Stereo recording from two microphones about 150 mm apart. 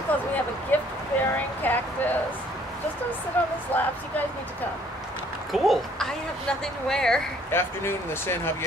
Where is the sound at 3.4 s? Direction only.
10° left (ahead or behind).